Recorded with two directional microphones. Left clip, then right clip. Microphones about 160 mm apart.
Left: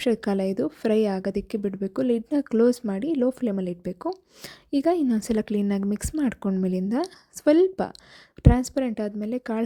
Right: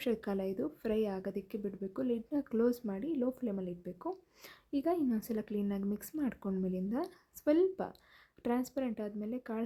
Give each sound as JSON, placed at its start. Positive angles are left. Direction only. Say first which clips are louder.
{"t": 0.0, "sound": "a woman's voice", "louder": "left 11 dB", "side_deg": 40}